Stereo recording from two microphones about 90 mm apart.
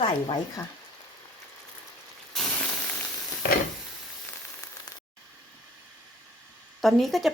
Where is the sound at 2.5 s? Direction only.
15° left (ahead or behind).